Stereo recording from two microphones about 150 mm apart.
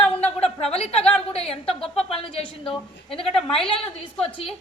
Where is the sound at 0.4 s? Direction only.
40° left (ahead or behind).